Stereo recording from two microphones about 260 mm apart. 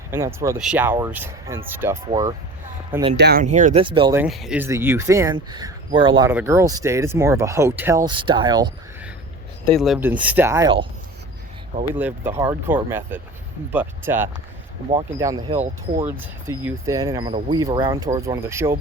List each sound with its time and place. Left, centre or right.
0.1 s speech: centre
3.2 s speech: right
3.4 s speech: right
9.7 s speech: centre
11.9 s speech: centre; by 16.0 s right
16.0 s speech: centre